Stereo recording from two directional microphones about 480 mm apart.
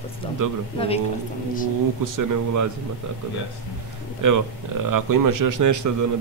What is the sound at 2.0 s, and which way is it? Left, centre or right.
Speech, right.